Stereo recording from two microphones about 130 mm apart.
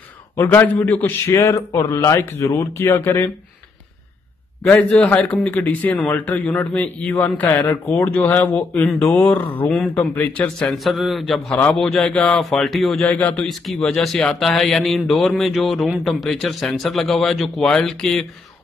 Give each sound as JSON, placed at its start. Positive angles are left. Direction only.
{"t": 0.4, "sound": "a man's voice", "side_deg": 15}
{"t": 4.6, "sound": "a man's voice", "side_deg": 10}
{"t": 10.8, "sound": "speech", "side_deg": 0}
{"t": 13.0, "sound": "a man's voice", "side_deg": 10}
{"t": 13.5, "sound": "speech", "side_deg": 0}